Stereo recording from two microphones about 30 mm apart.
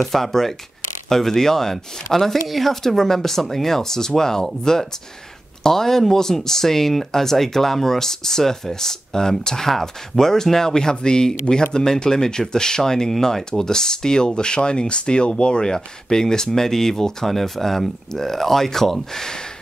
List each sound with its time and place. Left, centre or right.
0.0 s speech: centre
2.9 s speech: centre
5.6 s speech: centre; by 15.7 s left
15.7 s speech: centre